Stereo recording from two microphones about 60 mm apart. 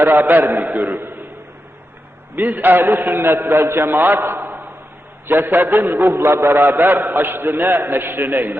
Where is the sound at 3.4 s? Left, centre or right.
Right.